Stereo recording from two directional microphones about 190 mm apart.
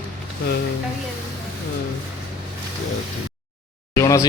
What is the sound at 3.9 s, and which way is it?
Speech, 15° left (ahead or behind).